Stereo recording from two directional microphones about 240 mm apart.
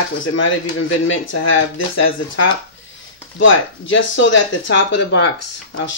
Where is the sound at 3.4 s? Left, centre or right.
Left.